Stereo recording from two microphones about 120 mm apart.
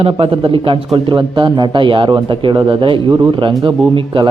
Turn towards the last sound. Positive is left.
turn(degrees=-40)  # may be behind; listen again after turning